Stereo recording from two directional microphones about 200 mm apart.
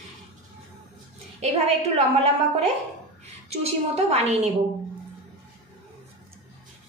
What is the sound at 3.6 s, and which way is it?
Speech, 30° right (ahead or behind).